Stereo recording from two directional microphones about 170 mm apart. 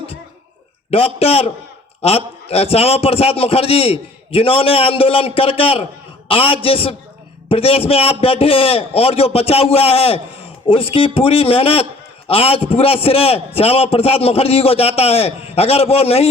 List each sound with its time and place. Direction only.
0.9 s a man's voice: 35° left (ahead or behind)